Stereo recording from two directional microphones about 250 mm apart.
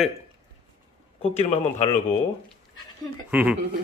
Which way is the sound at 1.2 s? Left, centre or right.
Left.